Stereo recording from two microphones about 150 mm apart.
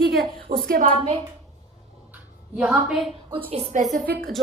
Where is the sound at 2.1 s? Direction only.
5° right (ahead or behind).